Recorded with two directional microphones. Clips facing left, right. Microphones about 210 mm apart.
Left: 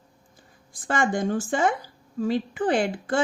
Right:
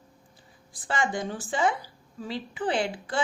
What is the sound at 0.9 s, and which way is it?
A woman's voice, 50° left (ahead or behind).